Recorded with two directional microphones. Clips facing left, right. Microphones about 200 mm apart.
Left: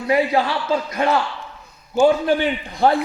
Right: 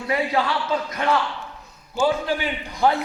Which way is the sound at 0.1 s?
30° left (ahead or behind).